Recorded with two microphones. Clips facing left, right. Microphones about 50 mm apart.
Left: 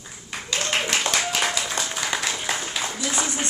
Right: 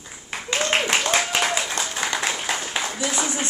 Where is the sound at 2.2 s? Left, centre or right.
Centre.